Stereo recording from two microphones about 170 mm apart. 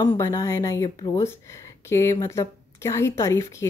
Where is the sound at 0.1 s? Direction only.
15° left (ahead or behind).